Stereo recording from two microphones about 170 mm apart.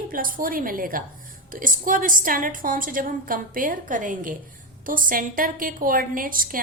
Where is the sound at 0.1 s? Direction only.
55° right (ahead or behind).